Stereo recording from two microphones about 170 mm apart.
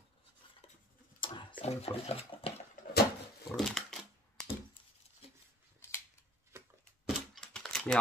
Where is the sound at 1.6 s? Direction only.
40° left (ahead or behind).